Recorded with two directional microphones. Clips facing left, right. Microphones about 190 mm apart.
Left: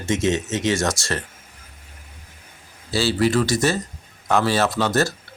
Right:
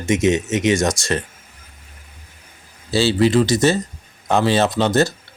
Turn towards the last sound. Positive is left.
turn(degrees=-20)  # may be behind; listen again after turning